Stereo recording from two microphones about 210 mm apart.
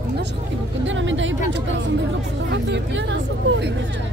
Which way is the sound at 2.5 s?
55° right (ahead or behind).